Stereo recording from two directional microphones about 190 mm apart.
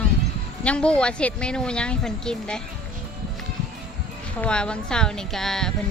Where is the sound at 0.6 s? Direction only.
5° left (ahead or behind).